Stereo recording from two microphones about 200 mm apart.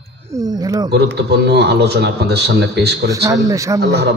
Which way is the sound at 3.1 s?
15° right (ahead or behind).